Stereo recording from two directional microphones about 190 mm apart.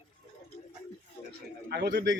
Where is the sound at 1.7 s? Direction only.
60° right (ahead or behind).